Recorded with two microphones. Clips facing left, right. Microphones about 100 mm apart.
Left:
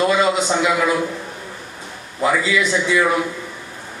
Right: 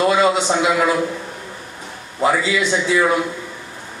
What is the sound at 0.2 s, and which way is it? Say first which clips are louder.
Speech: right 1 dB; 25° right (ahead or behind).